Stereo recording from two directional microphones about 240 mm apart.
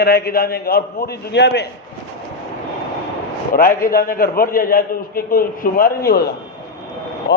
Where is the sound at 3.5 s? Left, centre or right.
Left.